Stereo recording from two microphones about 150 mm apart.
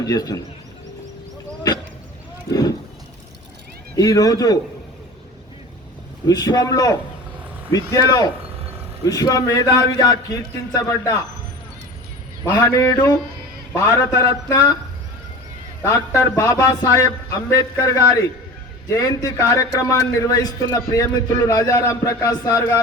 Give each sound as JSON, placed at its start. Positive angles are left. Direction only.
{"t": 0.0, "sound": "a man's voice", "side_deg": 25}
{"t": 2.5, "sound": "speech", "side_deg": 25}
{"t": 3.9, "sound": "a man's voice", "side_deg": 25}
{"t": 6.2, "sound": "a man's voice", "side_deg": 25}
{"t": 12.5, "sound": "a man's voice", "side_deg": 15}
{"t": 15.8, "sound": "a man's voice", "side_deg": 20}